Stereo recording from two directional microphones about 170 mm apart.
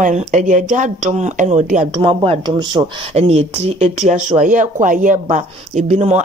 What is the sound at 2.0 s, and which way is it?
Speech, 30° right (ahead or behind).